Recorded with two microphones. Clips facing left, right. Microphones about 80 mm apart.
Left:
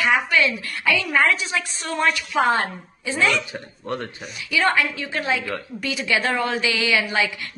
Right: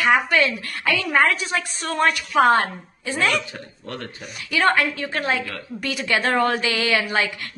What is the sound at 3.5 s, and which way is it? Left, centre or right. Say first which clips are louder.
Speech: left 5 dB; left.